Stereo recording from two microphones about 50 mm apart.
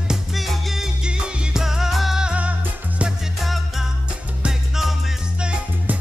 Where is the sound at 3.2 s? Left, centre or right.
Centre.